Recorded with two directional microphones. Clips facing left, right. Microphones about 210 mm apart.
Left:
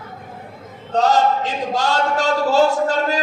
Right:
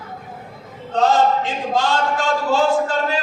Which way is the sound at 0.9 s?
40° left (ahead or behind).